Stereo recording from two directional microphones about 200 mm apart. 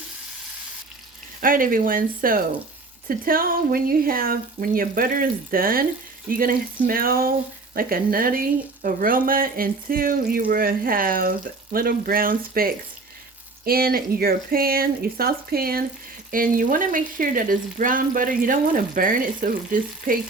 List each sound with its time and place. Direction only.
1.4 s a woman's voice: 45° right (ahead or behind)